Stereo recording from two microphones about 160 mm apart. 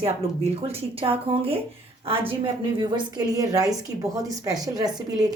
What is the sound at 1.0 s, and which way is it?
A woman's voice, 35° right (ahead or behind).